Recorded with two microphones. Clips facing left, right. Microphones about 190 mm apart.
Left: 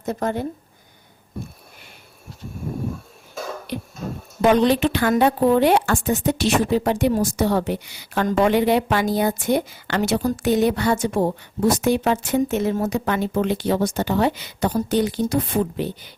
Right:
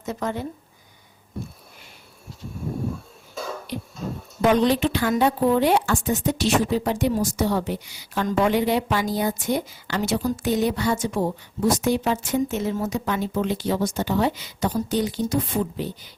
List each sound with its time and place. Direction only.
0.0 s speech: 55° left (ahead or behind)
3.7 s a sound: 60° left (ahead or behind)
4.4 s a woman's voice: 65° left (ahead or behind)